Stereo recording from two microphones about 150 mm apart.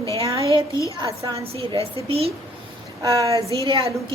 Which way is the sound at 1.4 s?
40° right (ahead or behind).